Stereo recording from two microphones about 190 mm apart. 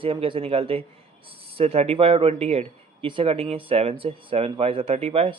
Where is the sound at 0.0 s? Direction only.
30° right (ahead or behind).